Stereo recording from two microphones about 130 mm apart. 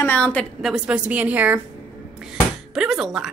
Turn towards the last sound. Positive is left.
turn(degrees=-5)  # may be behind; listen again after turning